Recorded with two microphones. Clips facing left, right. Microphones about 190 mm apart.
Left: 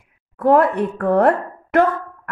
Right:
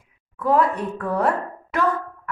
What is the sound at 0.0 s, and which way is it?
A woman's voice, 60° left (ahead or behind).